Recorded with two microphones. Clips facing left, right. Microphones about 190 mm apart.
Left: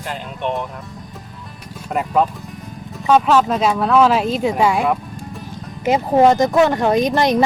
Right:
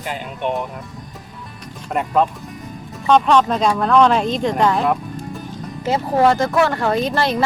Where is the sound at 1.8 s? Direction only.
Centre (ahead or behind).